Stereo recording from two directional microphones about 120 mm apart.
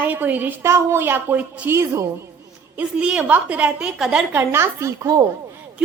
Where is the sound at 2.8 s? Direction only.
10° right (ahead or behind).